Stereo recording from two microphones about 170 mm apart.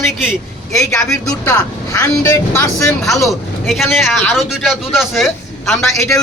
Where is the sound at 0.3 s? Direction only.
15° left (ahead or behind).